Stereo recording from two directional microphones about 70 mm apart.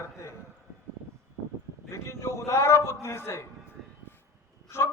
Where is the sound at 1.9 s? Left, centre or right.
Left.